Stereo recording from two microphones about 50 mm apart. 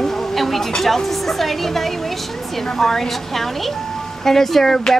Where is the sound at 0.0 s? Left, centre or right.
Centre.